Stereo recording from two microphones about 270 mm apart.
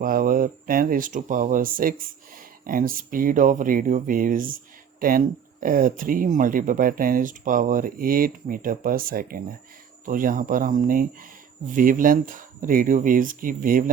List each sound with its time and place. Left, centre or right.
0.0 s speech: right